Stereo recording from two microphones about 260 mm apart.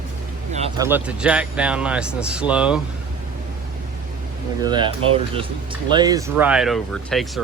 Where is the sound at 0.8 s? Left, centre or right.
Centre.